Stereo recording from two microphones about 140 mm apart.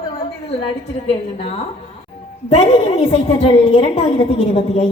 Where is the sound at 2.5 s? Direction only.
45° left (ahead or behind).